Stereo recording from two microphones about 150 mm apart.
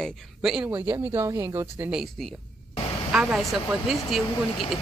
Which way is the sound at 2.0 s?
Centre (ahead or behind).